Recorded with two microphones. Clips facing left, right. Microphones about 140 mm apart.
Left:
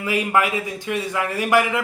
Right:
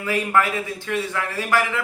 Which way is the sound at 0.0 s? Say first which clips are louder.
Left 1 dB; 10° left (ahead or behind).